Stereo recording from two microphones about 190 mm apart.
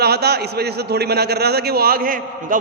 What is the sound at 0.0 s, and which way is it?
A man's voice, 60° right (ahead or behind).